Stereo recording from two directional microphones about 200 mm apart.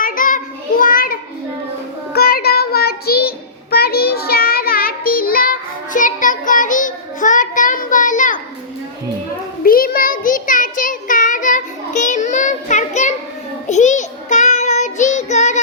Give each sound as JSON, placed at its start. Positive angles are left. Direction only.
{"t": 0.0, "sound": "child singing", "side_deg": 45}
{"t": 9.6, "sound": "child singing", "side_deg": 45}